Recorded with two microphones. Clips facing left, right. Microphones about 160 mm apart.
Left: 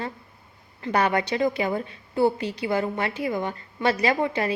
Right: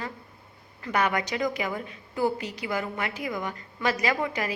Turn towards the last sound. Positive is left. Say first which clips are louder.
# left 4 dB
turn(degrees=30)  # may be behind; listen again after turning